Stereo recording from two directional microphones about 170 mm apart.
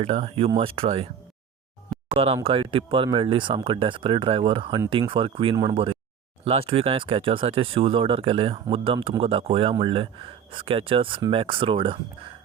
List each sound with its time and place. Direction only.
0.0 s speech: 35° right (ahead or behind)
2.0 s speech: 35° right (ahead or behind)